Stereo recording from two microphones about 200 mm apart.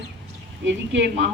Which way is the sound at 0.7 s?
60° right (ahead or behind).